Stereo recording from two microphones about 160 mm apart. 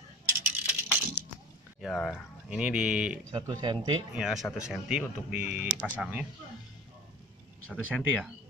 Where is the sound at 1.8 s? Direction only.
Centre (ahead or behind).